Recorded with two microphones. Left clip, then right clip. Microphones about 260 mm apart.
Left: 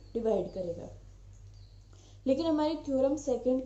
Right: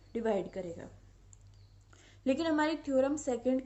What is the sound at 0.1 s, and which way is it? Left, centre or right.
Speech, right.